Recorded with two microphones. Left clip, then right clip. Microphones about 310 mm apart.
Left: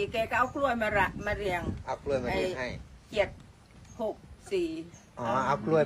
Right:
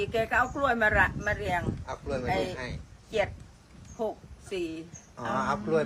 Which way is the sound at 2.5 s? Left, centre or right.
Left.